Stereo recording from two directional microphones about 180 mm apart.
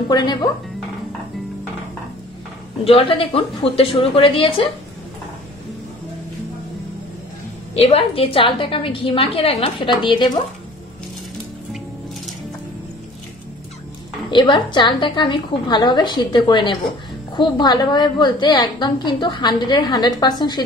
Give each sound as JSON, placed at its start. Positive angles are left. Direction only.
{"t": 0.1, "sound": "a woman's voice", "side_deg": 25}
{"t": 2.8, "sound": "a woman's voice", "side_deg": 30}
{"t": 7.7, "sound": "a woman's voice", "side_deg": 35}
{"t": 14.3, "sound": "a woman's voice", "side_deg": 25}